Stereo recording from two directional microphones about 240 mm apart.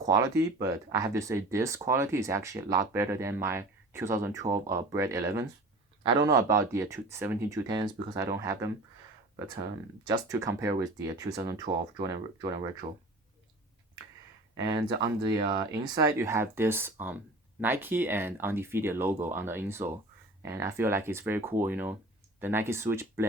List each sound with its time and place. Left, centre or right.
0.0 s speech: centre
14.5 s speech: centre